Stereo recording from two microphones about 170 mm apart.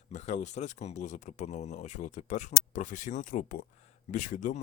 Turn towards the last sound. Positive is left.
turn(degrees=45)  # may be behind; listen again after turning